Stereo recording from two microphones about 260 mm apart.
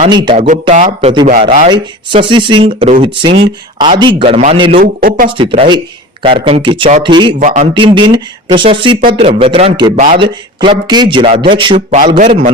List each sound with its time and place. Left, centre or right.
0.0 s speech: centre; by 5.3 s right
5.3 s speech: right
7.3 s speech: right
7.7 s speech: centre
12.1 s speech: right